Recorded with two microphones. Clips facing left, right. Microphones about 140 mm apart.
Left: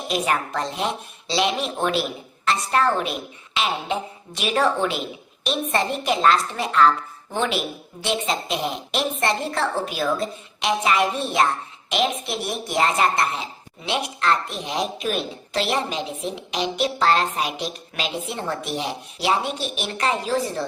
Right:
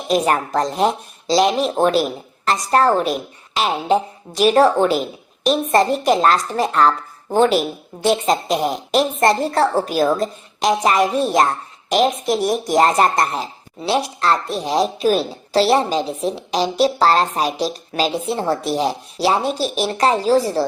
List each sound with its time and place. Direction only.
0.1 s speech: 40° right (ahead or behind)